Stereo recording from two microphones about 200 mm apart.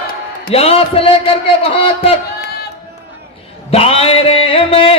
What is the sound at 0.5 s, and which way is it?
Music, 30° left (ahead or behind).